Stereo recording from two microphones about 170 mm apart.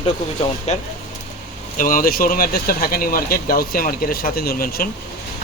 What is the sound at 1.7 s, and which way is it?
Speech, 55° left (ahead or behind).